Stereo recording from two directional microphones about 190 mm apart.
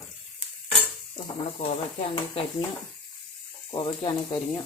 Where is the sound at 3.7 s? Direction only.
25° left (ahead or behind).